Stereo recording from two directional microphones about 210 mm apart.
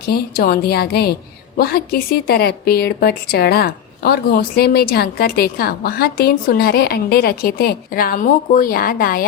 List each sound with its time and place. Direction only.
0.1 s speech: 45° left (ahead or behind)